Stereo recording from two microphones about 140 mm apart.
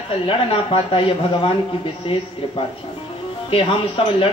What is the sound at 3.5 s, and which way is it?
Speech, 40° left (ahead or behind).